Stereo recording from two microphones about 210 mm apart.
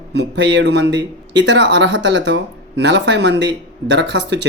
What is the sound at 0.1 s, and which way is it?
Speech, 55° right (ahead or behind).